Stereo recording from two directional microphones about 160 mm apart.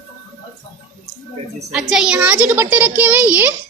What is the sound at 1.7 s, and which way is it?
A child's voice, 5° right (ahead or behind).